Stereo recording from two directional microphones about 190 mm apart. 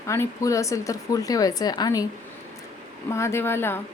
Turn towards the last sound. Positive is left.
turn(degrees=10)  # may be behind; listen again after turning